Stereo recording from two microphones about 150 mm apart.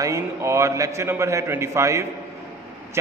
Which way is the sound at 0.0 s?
20° right (ahead or behind).